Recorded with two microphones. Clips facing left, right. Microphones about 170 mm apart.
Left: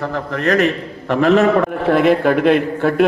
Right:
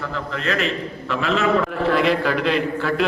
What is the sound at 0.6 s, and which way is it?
Speech, 60° left (ahead or behind).